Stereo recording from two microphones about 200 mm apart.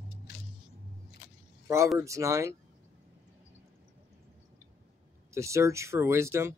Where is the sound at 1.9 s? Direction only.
15° right (ahead or behind).